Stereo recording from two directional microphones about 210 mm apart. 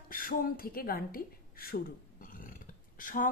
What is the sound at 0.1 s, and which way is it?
A woman's voice, 40° left (ahead or behind).